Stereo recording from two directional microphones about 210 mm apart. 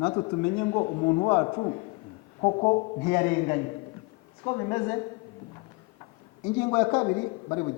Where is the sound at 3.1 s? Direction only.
15° left (ahead or behind).